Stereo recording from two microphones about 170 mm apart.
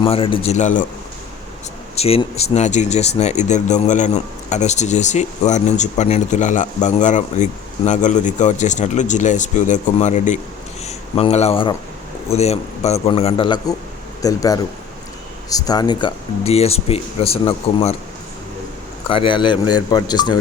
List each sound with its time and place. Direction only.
0.0 s speech: 30° left (ahead or behind); by 0.9 s 45° left (ahead or behind)
2.0 s speech: 35° left (ahead or behind)
19.0 s speech: 30° left (ahead or behind)